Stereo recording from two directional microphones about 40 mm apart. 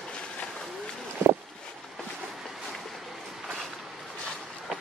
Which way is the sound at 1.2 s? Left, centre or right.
Right.